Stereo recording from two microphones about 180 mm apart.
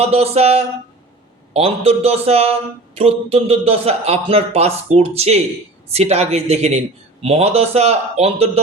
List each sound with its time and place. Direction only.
0.0 s speech: 35° right (ahead or behind)